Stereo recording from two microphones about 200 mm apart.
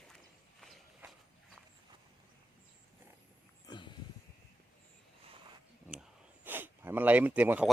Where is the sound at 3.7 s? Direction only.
20° left (ahead or behind).